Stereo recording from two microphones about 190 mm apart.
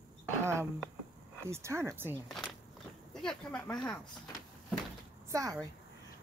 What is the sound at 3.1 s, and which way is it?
Speech, 5° left (ahead or behind).